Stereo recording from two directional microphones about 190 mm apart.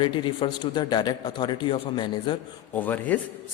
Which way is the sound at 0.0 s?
25° left (ahead or behind).